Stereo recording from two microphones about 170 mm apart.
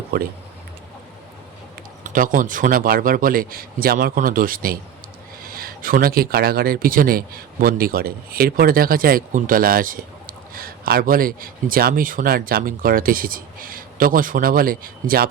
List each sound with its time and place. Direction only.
0.1 s speech: 60° right (ahead or behind)
2.0 s speech: 55° right (ahead or behind)